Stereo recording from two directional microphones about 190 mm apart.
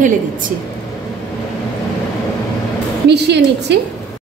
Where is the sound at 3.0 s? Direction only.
65° right (ahead or behind).